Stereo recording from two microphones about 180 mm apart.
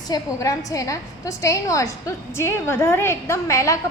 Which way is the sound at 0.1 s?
20° left (ahead or behind).